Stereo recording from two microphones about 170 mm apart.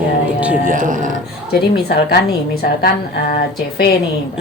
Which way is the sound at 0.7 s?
50° right (ahead or behind).